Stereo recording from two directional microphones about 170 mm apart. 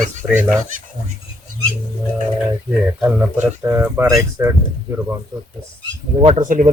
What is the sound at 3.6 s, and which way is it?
Speech, 15° right (ahead or behind).